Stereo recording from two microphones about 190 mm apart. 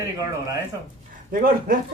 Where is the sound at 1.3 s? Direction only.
45° right (ahead or behind).